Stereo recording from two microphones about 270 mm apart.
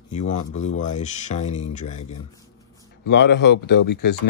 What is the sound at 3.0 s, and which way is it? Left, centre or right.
Speech, left.